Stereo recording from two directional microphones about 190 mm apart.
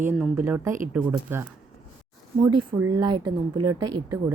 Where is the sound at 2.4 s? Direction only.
25° right (ahead or behind).